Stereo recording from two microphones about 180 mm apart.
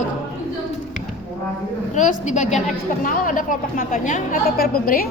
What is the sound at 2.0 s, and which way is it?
A woman's voice, 45° left (ahead or behind).